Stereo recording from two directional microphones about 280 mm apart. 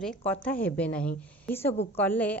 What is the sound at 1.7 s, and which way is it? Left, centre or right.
Speech, left.